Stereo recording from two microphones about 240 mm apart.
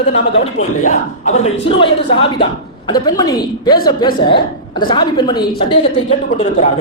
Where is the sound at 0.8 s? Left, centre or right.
Left.